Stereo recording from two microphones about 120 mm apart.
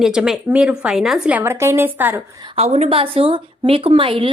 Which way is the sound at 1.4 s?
20° right (ahead or behind).